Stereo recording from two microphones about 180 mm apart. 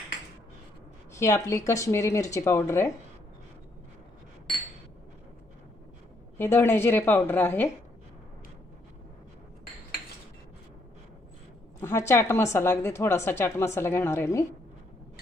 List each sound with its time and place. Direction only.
1.1 s a woman's voice: 15° left (ahead or behind)
6.3 s a woman's voice: 10° left (ahead or behind)
11.8 s a woman's voice: 15° left (ahead or behind)